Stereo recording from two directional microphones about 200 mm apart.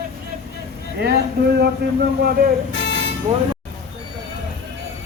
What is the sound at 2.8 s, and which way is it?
Vehicle, 60° left (ahead or behind).